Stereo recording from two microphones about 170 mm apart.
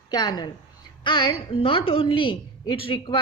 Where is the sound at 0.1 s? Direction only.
25° left (ahead or behind).